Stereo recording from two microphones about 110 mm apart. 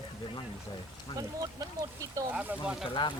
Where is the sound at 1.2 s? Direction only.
35° right (ahead or behind).